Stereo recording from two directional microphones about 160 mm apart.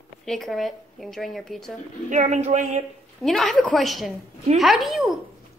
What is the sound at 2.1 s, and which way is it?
Speech, 45° right (ahead or behind).